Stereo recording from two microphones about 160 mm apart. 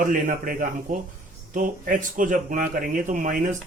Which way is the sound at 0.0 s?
55° right (ahead or behind).